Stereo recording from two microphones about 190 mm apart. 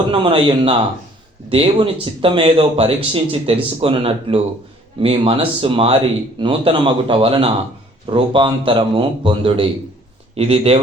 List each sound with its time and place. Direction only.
0.1 s speech: 30° right (ahead or behind)